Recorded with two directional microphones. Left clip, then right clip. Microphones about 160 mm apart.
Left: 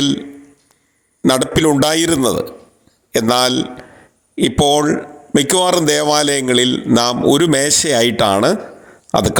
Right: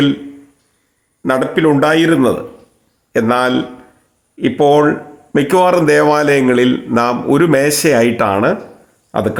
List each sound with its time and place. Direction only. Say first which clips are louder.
1.2 s a man's voice: right 1 dB; 40° left (ahead or behind)